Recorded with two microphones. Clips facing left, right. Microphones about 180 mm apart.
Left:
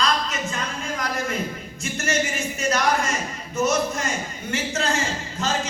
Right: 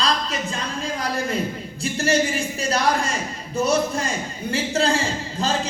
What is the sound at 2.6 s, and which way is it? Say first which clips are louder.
Speech: even; 30° right (ahead or behind).